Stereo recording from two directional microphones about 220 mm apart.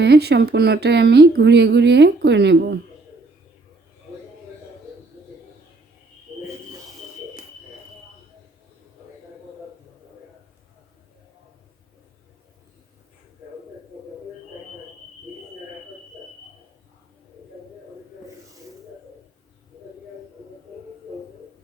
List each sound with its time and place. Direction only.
0.0 s speech: 50° right (ahead or behind)